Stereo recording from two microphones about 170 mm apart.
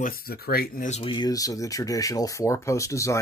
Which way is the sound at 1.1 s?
20° left (ahead or behind).